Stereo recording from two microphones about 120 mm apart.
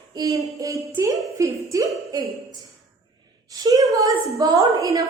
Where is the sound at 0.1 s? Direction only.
30° right (ahead or behind).